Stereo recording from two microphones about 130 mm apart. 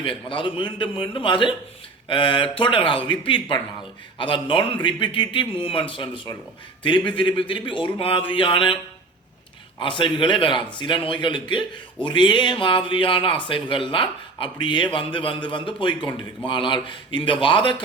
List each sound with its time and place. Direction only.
0.0 s speech: 40° left (ahead or behind)
9.8 s speech: 40° left (ahead or behind)